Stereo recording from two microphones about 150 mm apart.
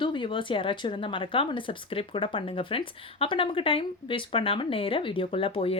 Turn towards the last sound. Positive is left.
turn(degrees=40)  # may be behind; listen again after turning